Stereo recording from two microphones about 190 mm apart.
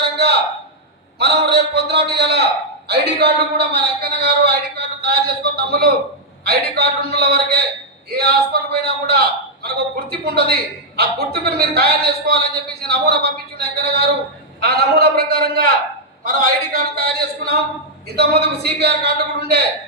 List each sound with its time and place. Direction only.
1.2 s a man's voice: 60° right (ahead or behind)